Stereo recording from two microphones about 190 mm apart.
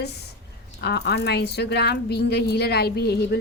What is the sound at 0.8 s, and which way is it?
A woman's voice, 60° left (ahead or behind).